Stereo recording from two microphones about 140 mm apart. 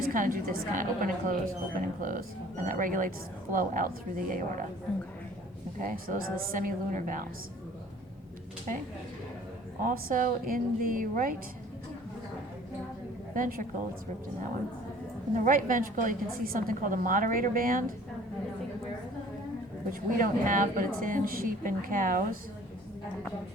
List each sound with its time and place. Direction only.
0.1 s a woman's voice: 85° right
4.9 s a woman's voice: 5° left (ahead or behind)
5.8 s a woman's voice: 85° right
9.8 s a woman's voice: 75° right (ahead or behind)
13.3 s a woman's voice: 75° right (ahead or behind)
15.4 s a woman's voice: 75° right (ahead or behind)
19.9 s a woman's voice: 80° right